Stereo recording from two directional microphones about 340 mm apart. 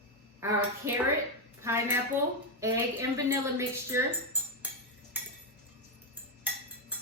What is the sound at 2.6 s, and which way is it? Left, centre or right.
Speech, centre.